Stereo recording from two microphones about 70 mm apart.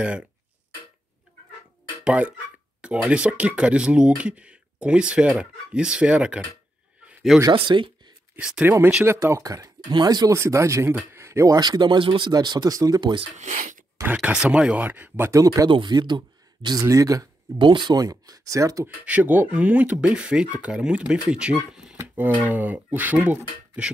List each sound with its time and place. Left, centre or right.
2.0 s speech: centre
7.4 s speech: right
8.4 s speech: centre
9.0 s speech: right
9.4 s speech: right
10.3 s speech: right
11.1 s a sound: right
11.5 s speech: right
14.1 s speech: centre
14.9 s speech: right
15.3 s speech: right
16.8 s speech: right
17.6 s speech: right
19.0 s speech: right